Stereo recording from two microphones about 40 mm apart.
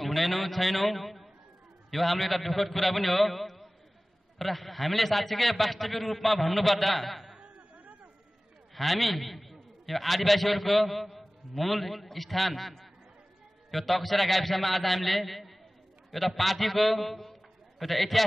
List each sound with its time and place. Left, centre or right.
0.0 s a man's voice: centre
7.7 s a sound: right
8.7 s a man's voice: centre